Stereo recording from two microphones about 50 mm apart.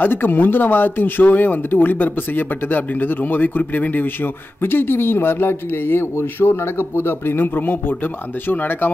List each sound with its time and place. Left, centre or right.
0.0 s a man's voice: left